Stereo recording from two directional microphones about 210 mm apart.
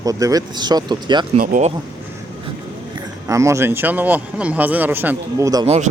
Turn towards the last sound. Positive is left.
turn(degrees=-15)  # may be behind; listen again after turning